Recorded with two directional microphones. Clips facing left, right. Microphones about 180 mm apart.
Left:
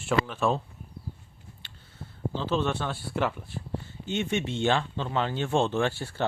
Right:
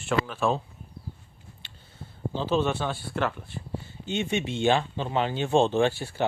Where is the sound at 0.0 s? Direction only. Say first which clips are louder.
Even; 5° left (ahead or behind).